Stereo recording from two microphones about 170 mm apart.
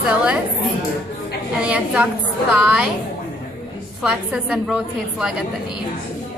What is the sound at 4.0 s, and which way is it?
A woman's voice, 5° right (ahead or behind).